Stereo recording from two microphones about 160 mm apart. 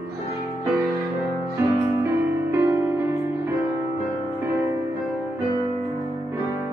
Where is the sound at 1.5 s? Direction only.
15° right (ahead or behind).